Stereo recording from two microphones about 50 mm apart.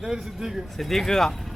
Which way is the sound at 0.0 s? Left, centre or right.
Centre.